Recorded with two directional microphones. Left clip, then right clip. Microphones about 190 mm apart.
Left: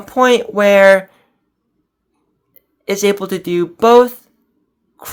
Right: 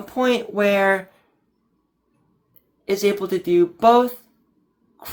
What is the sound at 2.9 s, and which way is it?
Speech, 45° left (ahead or behind).